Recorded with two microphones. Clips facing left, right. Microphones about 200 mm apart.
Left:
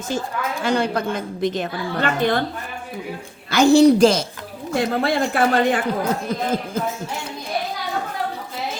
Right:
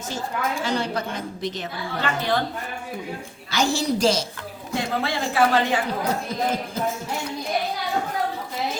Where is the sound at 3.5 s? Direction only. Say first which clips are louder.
Left 11 dB; 60° left (ahead or behind).